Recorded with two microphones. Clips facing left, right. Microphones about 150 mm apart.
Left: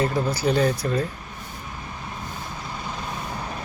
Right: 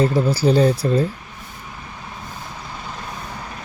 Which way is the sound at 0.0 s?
30° right (ahead or behind).